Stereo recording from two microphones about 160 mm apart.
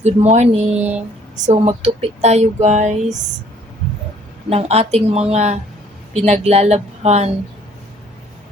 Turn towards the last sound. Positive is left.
turn(degrees=-45)  # may be behind; listen again after turning